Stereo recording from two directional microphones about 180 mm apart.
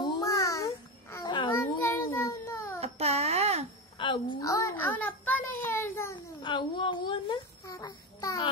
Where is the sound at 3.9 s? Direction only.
30° left (ahead or behind).